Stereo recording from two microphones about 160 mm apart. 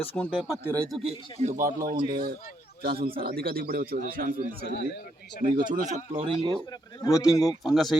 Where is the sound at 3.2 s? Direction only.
70° right (ahead or behind).